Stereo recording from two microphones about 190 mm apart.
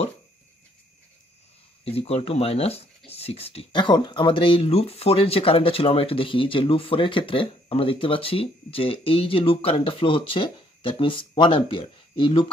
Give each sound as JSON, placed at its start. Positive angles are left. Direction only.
{"t": 1.9, "sound": "speech", "side_deg": 30}